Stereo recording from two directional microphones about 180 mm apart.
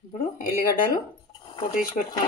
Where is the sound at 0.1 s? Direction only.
45° left (ahead or behind).